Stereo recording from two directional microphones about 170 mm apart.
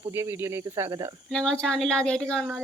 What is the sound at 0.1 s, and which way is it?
Speech, 15° right (ahead or behind).